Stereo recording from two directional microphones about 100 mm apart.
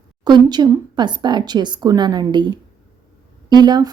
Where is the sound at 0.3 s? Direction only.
45° right (ahead or behind).